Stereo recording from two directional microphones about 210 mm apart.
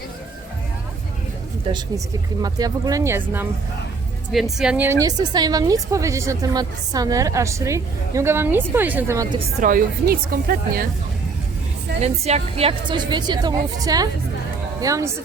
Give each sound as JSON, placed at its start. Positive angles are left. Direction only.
{"t": 2.4, "sound": "a woman's voice", "side_deg": -15}
{"t": 4.3, "sound": "a woman's voice", "side_deg": 0}
{"t": 9.6, "sound": "speech", "side_deg": -40}
{"t": 12.0, "sound": "a woman's voice", "side_deg": -30}